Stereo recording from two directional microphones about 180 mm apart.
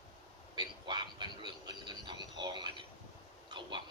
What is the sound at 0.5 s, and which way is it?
Vehicle, 25° right (ahead or behind).